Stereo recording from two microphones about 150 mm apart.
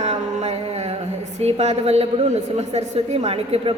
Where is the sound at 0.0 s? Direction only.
50° right (ahead or behind).